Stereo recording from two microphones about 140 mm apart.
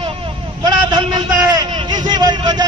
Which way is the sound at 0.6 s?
30° right (ahead or behind).